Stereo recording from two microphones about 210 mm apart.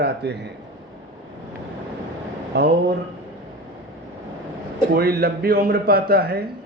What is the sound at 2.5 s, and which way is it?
Speech, 55° right (ahead or behind).